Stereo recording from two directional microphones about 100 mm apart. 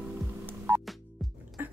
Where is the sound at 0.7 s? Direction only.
25° right (ahead or behind).